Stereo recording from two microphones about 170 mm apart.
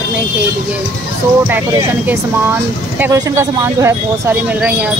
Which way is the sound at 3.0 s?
15° right (ahead or behind).